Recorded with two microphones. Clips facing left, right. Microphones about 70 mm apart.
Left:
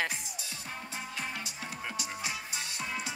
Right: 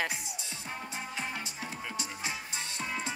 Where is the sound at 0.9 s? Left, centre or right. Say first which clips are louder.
Even; right.